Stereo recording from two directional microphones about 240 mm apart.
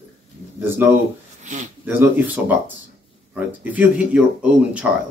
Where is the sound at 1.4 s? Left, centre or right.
Right.